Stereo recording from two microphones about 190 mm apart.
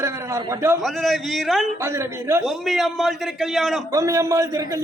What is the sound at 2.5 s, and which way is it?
A man's voice, centre (ahead or behind).